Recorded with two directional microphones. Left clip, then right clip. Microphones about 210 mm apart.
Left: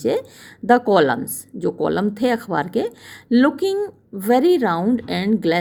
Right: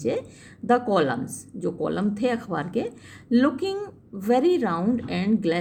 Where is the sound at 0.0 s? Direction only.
40° left (ahead or behind).